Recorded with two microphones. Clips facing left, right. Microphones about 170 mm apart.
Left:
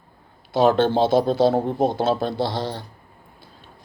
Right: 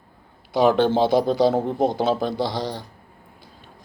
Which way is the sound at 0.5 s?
15° right (ahead or behind).